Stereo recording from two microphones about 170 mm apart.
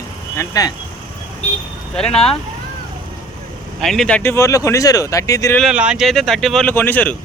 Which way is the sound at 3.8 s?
Centre (ahead or behind).